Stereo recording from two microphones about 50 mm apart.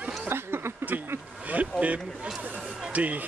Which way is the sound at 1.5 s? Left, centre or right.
Right.